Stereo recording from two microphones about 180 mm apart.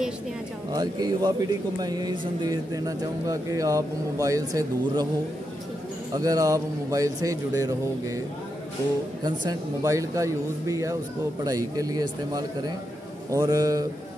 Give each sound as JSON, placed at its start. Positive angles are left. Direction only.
{"t": 0.7, "sound": "a man's voice", "side_deg": -20}
{"t": 6.1, "sound": "a man's voice", "side_deg": -20}
{"t": 9.2, "sound": "a man's voice", "side_deg": -20}